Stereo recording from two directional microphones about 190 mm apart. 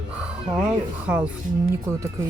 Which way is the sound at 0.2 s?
5° right (ahead or behind).